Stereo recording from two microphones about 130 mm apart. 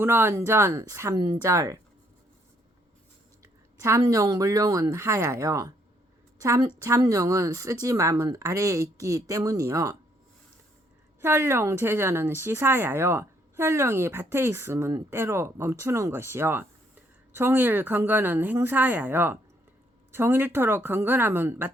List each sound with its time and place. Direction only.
0.0 s speech: 20° right (ahead or behind)
3.8 s a woman's voice: 25° right (ahead or behind)
11.2 s speech: 20° right (ahead or behind)